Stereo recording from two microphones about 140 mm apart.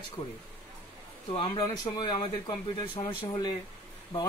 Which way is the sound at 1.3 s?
35° left (ahead or behind).